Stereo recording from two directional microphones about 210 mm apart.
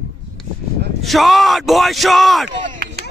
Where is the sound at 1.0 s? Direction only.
Centre (ahead or behind).